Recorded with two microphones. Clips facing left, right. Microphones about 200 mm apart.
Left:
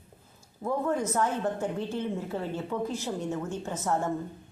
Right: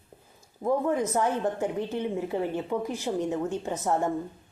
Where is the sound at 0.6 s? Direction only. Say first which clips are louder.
Right 3 dB; 15° right (ahead or behind).